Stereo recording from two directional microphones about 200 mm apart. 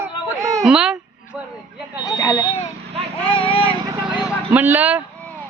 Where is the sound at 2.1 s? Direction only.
20° left (ahead or behind).